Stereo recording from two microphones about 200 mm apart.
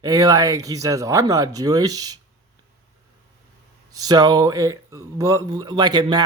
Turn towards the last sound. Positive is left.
turn(degrees=-20)  # may be behind; listen again after turning